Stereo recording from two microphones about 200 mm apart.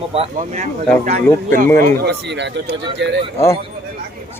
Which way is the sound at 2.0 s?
55° right (ahead or behind).